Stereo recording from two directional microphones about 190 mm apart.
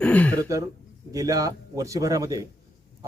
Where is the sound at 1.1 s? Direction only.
20° right (ahead or behind).